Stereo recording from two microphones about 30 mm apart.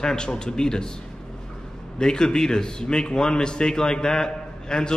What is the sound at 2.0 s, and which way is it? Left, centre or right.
A man's voice, left.